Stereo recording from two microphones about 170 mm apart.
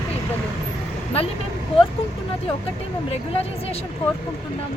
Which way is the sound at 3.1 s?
35° left (ahead or behind).